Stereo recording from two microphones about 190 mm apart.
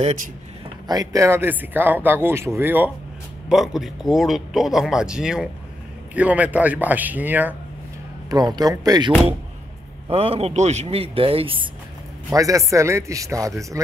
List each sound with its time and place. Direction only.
0.8 s speech: 20° right (ahead or behind)
8.3 s speech: 20° right (ahead or behind)
10.0 s speech: 30° right (ahead or behind)
12.3 s speech: 15° right (ahead or behind)